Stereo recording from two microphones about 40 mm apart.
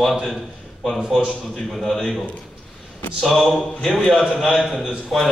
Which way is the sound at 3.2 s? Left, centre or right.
Centre.